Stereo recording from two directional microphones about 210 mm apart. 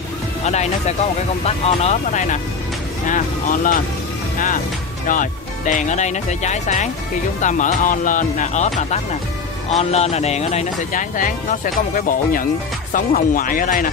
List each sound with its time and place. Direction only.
0.5 s speech: 30° left (ahead or behind)
5.0 s speech: 40° left (ahead or behind)